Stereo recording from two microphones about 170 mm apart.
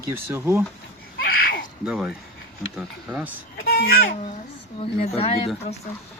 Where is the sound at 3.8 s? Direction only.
55° left (ahead or behind).